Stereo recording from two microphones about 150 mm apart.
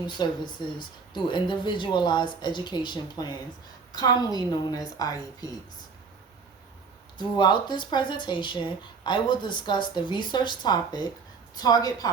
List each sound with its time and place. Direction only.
0.2 s speech: 30° left (ahead or behind)
7.2 s speech: 30° left (ahead or behind)